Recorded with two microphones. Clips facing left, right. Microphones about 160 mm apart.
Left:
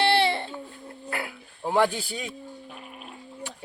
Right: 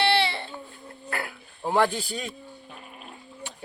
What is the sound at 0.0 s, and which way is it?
Baby cry, 45° left (ahead or behind).